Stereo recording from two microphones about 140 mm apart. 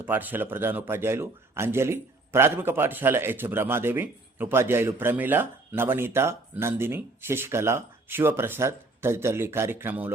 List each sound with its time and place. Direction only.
0.0 s a man's voice: 15° right (ahead or behind)